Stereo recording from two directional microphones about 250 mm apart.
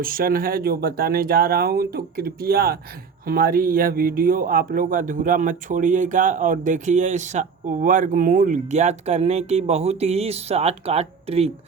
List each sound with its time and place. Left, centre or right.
0.0 s speech: right